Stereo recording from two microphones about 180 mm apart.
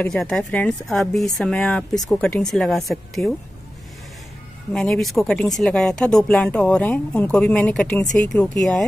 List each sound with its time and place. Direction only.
0.0 s speech: 5° left (ahead or behind)
4.7 s speech: centre (ahead or behind)